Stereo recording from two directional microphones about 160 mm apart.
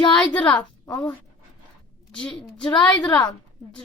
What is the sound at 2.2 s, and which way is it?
Speech, 5° left (ahead or behind).